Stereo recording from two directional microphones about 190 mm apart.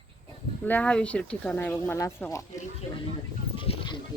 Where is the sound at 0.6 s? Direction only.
5° left (ahead or behind).